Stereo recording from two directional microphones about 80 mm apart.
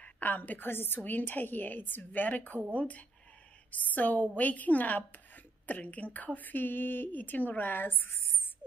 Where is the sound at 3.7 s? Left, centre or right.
Centre.